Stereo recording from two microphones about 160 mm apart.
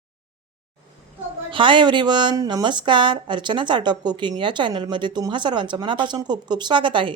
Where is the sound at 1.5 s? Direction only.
30° right (ahead or behind).